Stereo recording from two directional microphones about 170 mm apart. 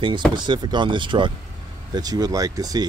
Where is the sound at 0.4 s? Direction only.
25° right (ahead or behind).